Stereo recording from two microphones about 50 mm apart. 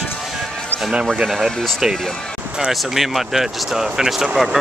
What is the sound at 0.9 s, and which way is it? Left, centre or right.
Speech, centre.